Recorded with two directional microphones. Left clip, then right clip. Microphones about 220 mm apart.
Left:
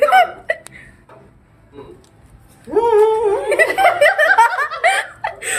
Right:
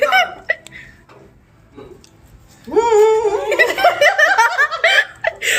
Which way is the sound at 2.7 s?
20° left (ahead or behind).